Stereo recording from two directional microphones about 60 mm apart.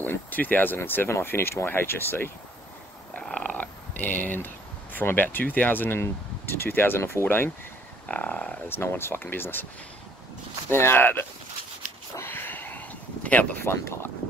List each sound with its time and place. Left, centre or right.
0.0 s speech: left
3.2 s purr: centre
4.9 s speech: left
8.1 s speech: left
8.6 s speech: left
10.7 s speech: left
12.2 s a sound: left
13.7 s speech: left